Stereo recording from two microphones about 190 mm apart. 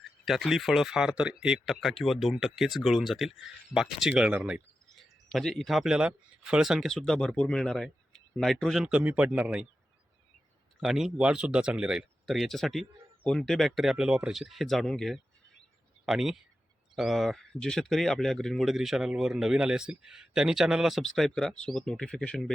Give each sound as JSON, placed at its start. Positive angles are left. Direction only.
{"t": 0.0, "sound": "speech", "side_deg": 0}
{"t": 10.8, "sound": "speech", "side_deg": 0}